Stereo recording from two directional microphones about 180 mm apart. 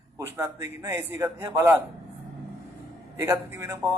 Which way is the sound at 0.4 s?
15° right (ahead or behind).